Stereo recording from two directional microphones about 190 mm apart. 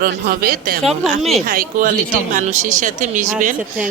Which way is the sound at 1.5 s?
50° right (ahead or behind).